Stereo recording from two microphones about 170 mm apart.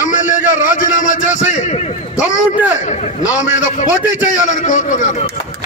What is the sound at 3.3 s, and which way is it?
A man's voice, 45° left (ahead or behind).